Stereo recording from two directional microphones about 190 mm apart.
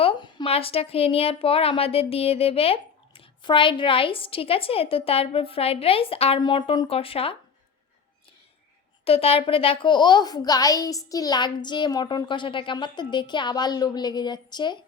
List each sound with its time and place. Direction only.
0.0 s speech: 25° left (ahead or behind)
9.0 s speech: 30° left (ahead or behind)